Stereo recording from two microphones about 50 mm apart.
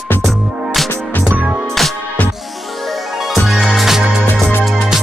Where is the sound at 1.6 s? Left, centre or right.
Centre.